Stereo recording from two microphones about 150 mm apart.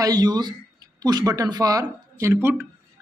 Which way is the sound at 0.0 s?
25° right (ahead or behind).